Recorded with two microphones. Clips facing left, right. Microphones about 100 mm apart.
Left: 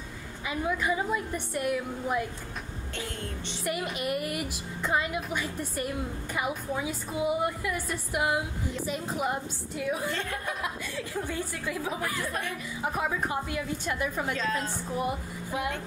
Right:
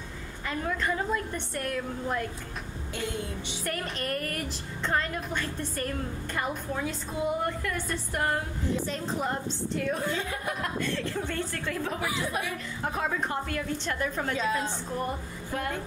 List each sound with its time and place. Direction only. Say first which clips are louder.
0.5 s a woman's voice: left 1 dB; 5° left (ahead or behind)
3.6 s a woman's voice: left 3 dB; 10° left (ahead or behind)
10.1 s a woman's voice: right 1 dB; 5° right (ahead or behind)
10.6 s a woman's voice: right 4 dB; 10° left (ahead or behind)
12.0 s a woman's voice: right 1 dB; 5° right (ahead or behind)
12.8 s a woman's voice: even; 5° left (ahead or behind)
14.3 s a woman's voice: right 2 dB; 10° right (ahead or behind)
15.0 s speech: left 4 dB; 10° left (ahead or behind)